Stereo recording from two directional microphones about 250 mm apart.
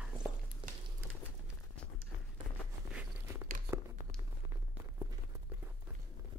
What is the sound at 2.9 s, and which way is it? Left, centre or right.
Walk, centre.